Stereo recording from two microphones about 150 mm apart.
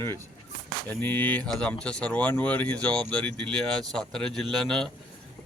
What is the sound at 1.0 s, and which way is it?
Speech, 10° left (ahead or behind).